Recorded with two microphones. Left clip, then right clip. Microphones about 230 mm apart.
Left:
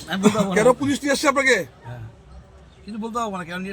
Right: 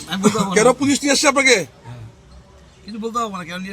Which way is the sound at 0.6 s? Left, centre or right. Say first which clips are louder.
Right 3 dB; right.